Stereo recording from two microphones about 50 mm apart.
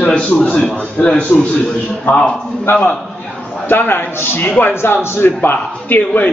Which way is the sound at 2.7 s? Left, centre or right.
Left.